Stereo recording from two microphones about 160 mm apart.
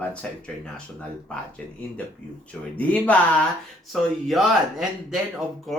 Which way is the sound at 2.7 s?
10° left (ahead or behind).